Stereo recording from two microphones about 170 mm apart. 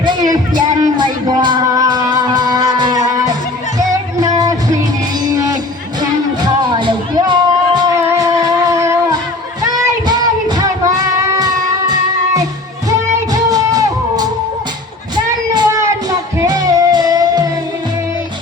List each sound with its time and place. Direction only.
0.0 s music: 25° right (ahead or behind)
6.0 s music: 25° right (ahead or behind)
8.7 s music: 15° right (ahead or behind)
13.1 s music: 20° right (ahead or behind)
15.1 s child singing: 20° right (ahead or behind)